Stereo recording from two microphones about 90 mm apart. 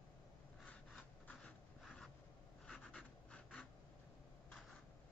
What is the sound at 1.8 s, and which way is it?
Writing, 5° left (ahead or behind).